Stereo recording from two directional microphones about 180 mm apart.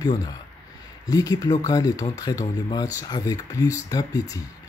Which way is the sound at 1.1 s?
20° left (ahead or behind).